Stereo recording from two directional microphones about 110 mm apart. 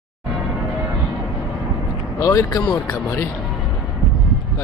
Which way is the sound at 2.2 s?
30° left (ahead or behind).